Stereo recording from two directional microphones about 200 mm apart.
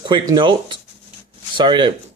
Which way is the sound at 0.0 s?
25° right (ahead or behind).